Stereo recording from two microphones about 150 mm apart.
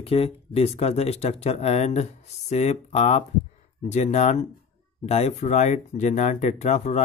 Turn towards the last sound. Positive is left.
turn(degrees=45)  # may be behind; listen again after turning